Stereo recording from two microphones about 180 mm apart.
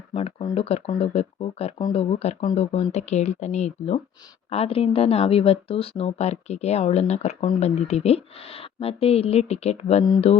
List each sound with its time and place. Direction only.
0.1 s speech: 35° left (ahead or behind)